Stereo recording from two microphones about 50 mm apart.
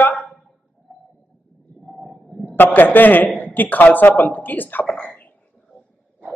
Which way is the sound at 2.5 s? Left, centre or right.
Left.